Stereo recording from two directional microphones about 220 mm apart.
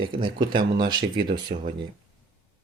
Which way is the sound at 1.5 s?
30° right (ahead or behind).